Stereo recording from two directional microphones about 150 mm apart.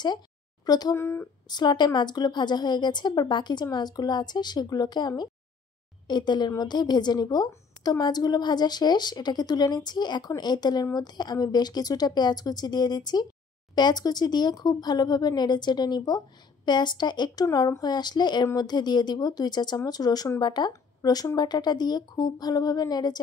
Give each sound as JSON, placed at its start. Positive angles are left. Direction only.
{"t": 0.7, "sound": "speech", "side_deg": 25}
{"t": 1.5, "sound": "a woman's voice", "side_deg": 30}